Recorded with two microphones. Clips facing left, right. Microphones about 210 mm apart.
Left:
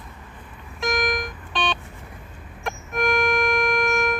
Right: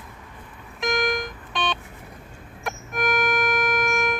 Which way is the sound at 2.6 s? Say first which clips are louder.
Left 2 dB; 5° right (ahead or behind).